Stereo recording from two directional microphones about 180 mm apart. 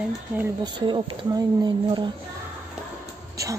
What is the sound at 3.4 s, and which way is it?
Speech, 20° right (ahead or behind).